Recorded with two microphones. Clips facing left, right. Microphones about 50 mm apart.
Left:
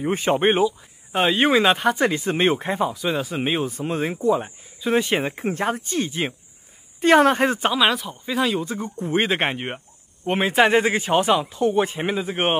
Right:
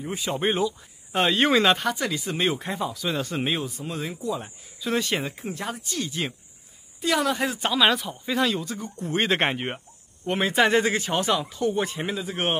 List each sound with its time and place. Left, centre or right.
0.0 s speech: left
0.7 s speech: centre
1.9 s speech: left; by 3.5 s centre
3.5 s speech: left
4.4 s speech: left
5.4 s speech: left
7.0 s speech: left
7.7 s speech: centre
9.0 s speech: centre
9.3 s speech: centre
10.8 s speech: centre